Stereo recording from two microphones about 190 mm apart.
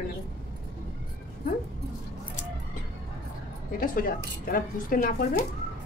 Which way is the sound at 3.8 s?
45° left (ahead or behind).